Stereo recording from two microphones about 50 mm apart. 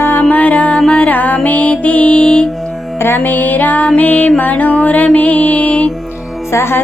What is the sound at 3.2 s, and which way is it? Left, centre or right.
Music, left.